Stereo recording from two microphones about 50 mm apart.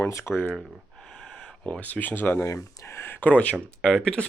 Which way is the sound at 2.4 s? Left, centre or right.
Left.